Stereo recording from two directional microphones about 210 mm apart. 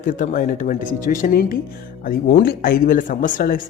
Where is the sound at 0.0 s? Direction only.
40° left (ahead or behind).